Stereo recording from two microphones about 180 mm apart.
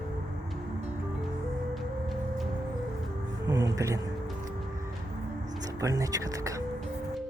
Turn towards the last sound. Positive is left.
turn(degrees=-20)  # may be behind; listen again after turning